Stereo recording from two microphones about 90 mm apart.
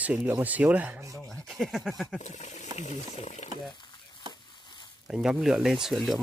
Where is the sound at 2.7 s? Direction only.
45° right (ahead or behind).